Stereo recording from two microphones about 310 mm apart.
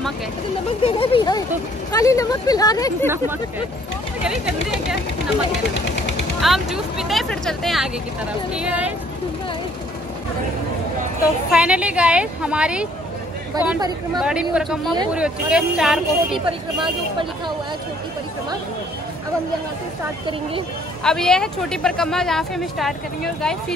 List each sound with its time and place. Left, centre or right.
0.8 s speech: centre
4.2 s speech: centre
6.4 s speech: centre
11.5 s speech: centre
16.4 s speech: centre
21.0 s speech: centre